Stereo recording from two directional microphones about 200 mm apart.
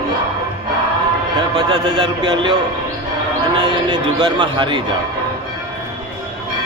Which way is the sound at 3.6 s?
20° right (ahead or behind).